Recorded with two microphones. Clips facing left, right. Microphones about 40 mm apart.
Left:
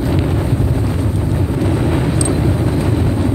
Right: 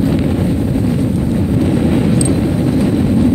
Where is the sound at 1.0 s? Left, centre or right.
Centre.